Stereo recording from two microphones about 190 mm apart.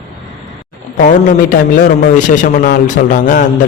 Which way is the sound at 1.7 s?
40° left (ahead or behind).